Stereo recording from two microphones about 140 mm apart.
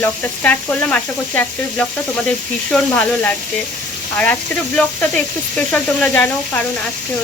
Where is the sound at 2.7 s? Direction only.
10° left (ahead or behind).